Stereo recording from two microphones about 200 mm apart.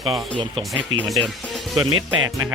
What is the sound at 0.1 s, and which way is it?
Speech, 25° right (ahead or behind).